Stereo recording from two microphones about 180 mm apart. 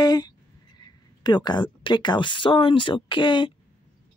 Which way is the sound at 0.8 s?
25° left (ahead or behind).